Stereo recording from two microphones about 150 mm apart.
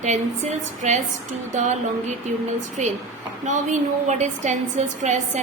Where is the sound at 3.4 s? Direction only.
55° right (ahead or behind).